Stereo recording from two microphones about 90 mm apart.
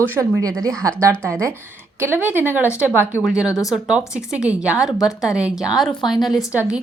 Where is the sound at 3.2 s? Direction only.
10° right (ahead or behind).